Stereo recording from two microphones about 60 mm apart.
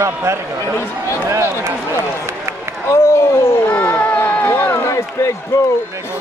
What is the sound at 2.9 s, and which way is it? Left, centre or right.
Speech, left.